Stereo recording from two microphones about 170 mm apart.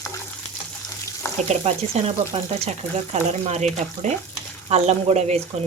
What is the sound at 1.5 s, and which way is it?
Speech, 40° right (ahead or behind).